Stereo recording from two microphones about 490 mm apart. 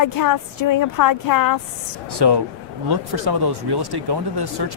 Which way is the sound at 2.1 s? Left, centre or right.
Right.